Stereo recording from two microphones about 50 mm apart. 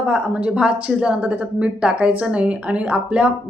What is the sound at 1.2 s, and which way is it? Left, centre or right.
Speech, right.